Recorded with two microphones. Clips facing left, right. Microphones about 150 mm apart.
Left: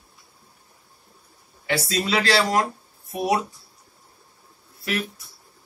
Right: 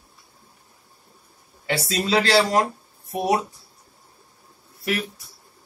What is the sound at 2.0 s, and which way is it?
Speech, 25° right (ahead or behind).